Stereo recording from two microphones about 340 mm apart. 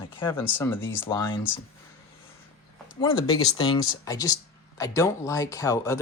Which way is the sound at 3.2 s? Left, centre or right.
Centre.